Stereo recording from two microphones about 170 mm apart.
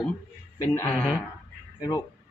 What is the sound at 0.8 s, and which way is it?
Speech, 10° left (ahead or behind).